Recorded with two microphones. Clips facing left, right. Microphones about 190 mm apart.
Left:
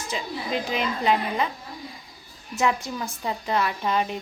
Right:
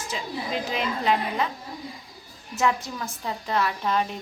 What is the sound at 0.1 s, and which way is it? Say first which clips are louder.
A woman's voice: left 2 dB; centre (ahead or behind).